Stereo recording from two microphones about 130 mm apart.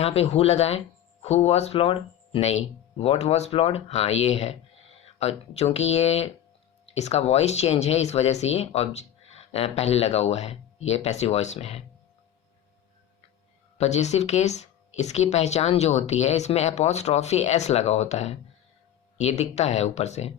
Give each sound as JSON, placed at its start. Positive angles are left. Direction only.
{"t": 0.0, "sound": "speech", "side_deg": 50}
{"t": 13.7, "sound": "speech", "side_deg": 55}